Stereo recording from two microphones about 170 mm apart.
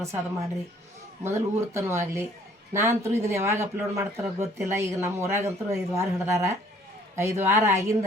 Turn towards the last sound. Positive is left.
turn(degrees=-15)  # may be behind; listen again after turning